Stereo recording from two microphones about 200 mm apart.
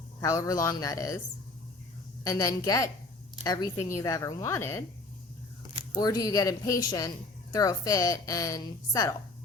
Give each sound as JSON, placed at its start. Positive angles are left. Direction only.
{"t": 0.2, "sound": "a woman's voice", "side_deg": 15}
{"t": 2.2, "sound": "a woman's voice", "side_deg": 15}
{"t": 5.9, "sound": "a woman's voice", "side_deg": 20}